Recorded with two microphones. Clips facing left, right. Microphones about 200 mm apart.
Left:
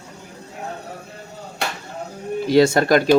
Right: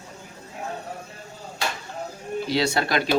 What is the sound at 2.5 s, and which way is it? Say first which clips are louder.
Speech: left 10 dB; 50° left (ahead or behind).